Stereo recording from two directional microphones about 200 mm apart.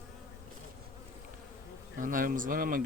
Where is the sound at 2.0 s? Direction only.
45° right (ahead or behind).